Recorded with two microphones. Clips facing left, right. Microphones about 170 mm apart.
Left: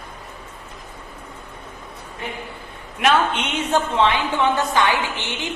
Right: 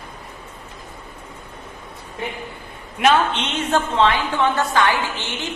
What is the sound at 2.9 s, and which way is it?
A woman's voice, centre (ahead or behind).